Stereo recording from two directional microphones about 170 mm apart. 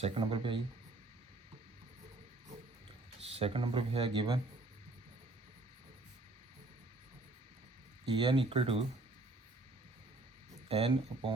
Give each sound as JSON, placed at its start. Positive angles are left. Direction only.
{"t": 0.0, "sound": "speech", "side_deg": -30}
{"t": 3.2, "sound": "speech", "side_deg": -35}
{"t": 8.1, "sound": "speech", "side_deg": -30}
{"t": 10.7, "sound": "speech", "side_deg": -35}